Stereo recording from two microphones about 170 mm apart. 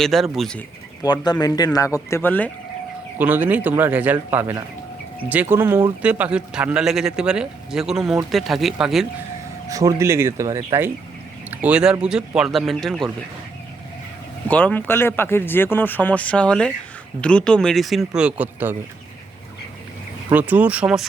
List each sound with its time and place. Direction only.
0.0 s speech: centre (ahead or behind)
1.0 s speech: 25° left (ahead or behind)
3.2 s a man's voice: 10° right (ahead or behind)
9.6 s a man's voice: 20° right (ahead or behind); by 13.1 s centre (ahead or behind)
14.4 s speech: 10° left (ahead or behind); by 18.8 s 10° right (ahead or behind)
20.3 s a man's voice: 10° right (ahead or behind)